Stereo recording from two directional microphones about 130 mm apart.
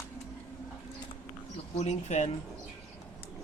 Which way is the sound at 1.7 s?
60° left (ahead or behind).